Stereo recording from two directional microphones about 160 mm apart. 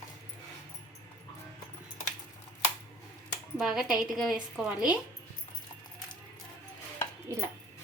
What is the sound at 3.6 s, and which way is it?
A woman's voice, 5° right (ahead or behind).